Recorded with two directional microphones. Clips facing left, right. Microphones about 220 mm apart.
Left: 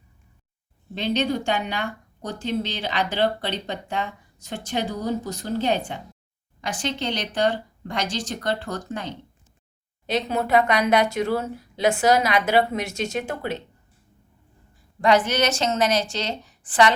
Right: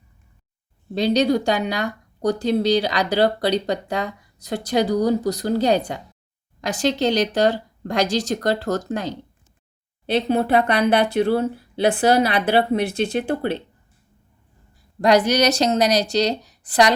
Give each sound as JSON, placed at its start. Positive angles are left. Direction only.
{"t": 0.9, "sound": "speech", "side_deg": -40}
{"t": 15.0, "sound": "speech", "side_deg": -40}